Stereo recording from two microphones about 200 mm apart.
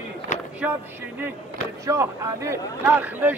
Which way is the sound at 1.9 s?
15° right (ahead or behind).